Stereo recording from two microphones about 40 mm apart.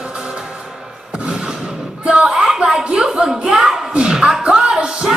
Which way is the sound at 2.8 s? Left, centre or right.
Right.